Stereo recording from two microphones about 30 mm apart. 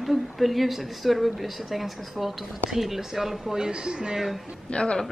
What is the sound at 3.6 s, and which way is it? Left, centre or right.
Speech, right.